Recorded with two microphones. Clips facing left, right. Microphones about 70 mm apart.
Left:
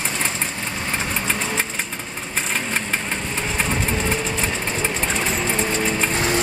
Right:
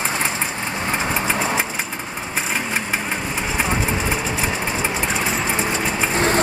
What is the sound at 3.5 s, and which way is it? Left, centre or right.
Vehicle, centre.